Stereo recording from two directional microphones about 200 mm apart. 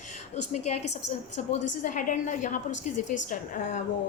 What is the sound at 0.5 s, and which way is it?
A woman's voice, 35° left (ahead or behind).